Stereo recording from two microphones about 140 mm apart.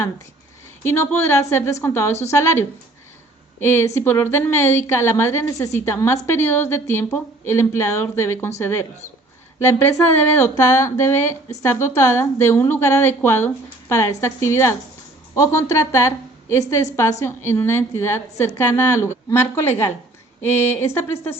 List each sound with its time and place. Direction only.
0.9 s a woman's voice: 15° left (ahead or behind)